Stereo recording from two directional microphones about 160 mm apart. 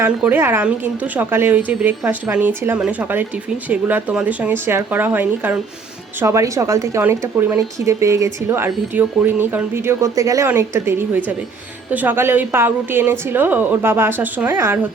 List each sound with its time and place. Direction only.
0.0 s a woman's voice: 10° right (ahead or behind)